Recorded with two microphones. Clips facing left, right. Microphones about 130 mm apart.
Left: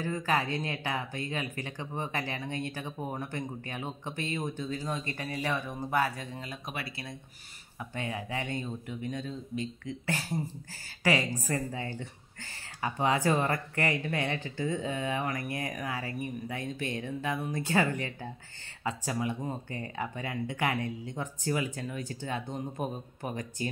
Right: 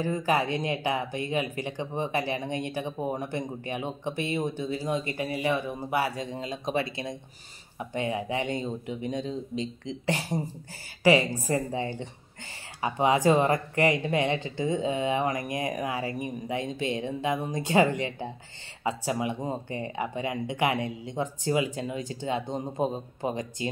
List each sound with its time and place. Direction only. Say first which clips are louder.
0.0 s speech: right 4 dB; 15° right (ahead or behind)